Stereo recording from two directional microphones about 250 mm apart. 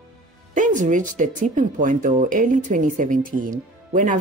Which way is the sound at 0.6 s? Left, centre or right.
Right.